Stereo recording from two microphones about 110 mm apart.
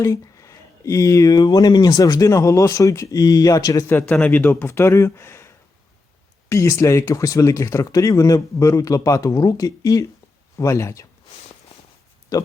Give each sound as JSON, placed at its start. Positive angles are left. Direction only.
{"t": 0.0, "sound": "speech", "side_deg": 30}
{"t": 3.8, "sound": "speech", "side_deg": 15}